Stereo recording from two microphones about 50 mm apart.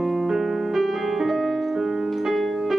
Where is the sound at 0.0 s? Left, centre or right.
Centre.